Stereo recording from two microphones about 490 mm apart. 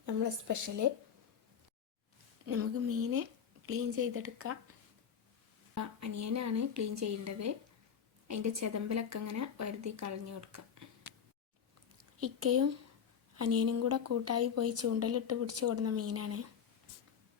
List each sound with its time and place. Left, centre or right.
0.0 s speech: right
2.5 s a woman's voice: right
5.7 s speech: right
12.2 s a woman's voice: right